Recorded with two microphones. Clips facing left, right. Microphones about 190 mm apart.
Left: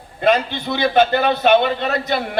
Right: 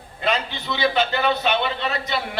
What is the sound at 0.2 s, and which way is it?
A man's voice, 50° left (ahead or behind).